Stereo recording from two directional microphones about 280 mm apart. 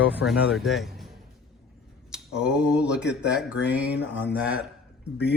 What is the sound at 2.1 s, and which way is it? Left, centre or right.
Speech, centre.